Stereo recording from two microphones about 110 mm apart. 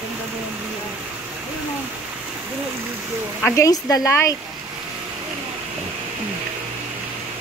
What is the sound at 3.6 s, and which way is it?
Speech, 35° left (ahead or behind).